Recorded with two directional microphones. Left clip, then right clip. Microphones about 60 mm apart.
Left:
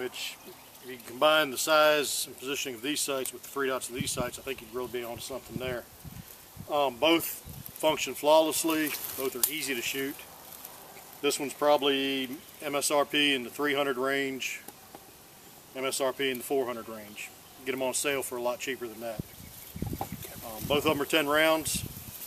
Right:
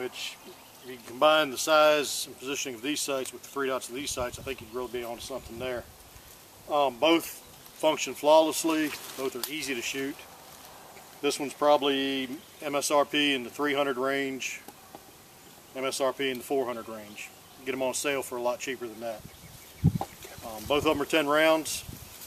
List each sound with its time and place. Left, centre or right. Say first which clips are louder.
0.0 s speech: even; centre
9.2 s speech: right 1 dB; left
9.6 s speech: right 1 dB; centre
11.1 s speech: right 1 dB; centre
15.7 s speech: right 1 dB; centre
20.7 s speech: right 1 dB; centre